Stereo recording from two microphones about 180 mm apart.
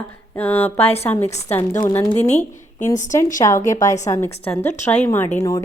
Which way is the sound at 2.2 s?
40° left (ahead or behind).